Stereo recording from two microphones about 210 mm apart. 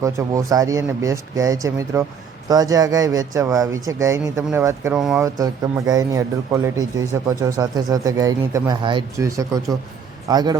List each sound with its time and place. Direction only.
0.0 s speech: 15° right (ahead or behind)
5.2 s speech: 15° right (ahead or behind)